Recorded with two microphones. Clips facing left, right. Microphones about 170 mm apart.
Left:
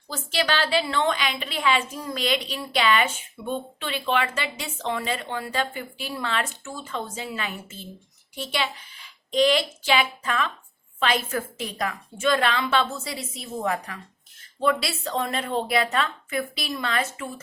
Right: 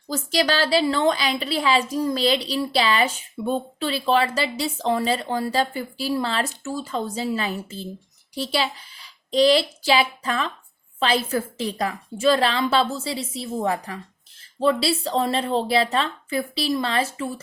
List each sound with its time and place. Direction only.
0.1 s a woman's voice: 40° right (ahead or behind)